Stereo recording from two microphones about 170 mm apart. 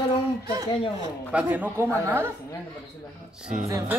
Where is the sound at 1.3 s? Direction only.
10° right (ahead or behind).